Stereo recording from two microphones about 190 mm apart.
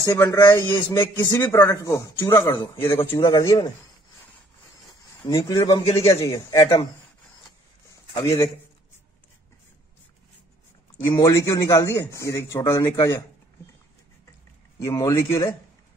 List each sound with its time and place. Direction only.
0.0 s a man's voice: 20° left (ahead or behind)
5.2 s a man's voice: 20° left (ahead or behind)
8.1 s a man's voice: 15° left (ahead or behind)
11.1 s a man's voice: 20° left (ahead or behind)
14.8 s a man's voice: 15° left (ahead or behind)